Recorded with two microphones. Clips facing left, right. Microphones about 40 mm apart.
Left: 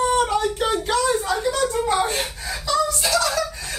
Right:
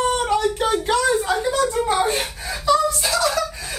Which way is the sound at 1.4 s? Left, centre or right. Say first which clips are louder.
Right 1 dB; centre.